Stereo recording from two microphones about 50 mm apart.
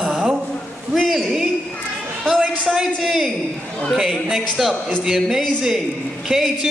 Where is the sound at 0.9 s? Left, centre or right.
Centre.